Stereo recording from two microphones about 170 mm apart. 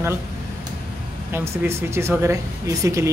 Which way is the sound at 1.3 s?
15° right (ahead or behind).